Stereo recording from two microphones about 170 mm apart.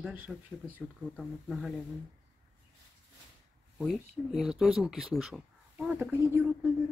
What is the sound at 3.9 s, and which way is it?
Speech, 5° right (ahead or behind).